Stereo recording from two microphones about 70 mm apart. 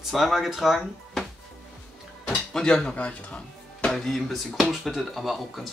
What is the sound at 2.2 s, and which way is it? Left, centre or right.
Speech, centre.